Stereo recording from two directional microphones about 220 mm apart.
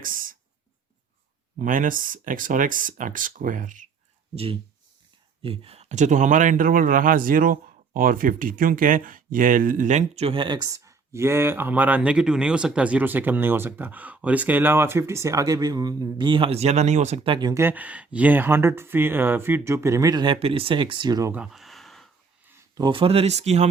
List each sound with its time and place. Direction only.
0.0 s a sound: 40° right (ahead or behind)
1.5 s speech: 35° right (ahead or behind)
5.4 s speech: 25° right (ahead or behind); by 22.5 s centre (ahead or behind)
22.7 s speech: 20° right (ahead or behind)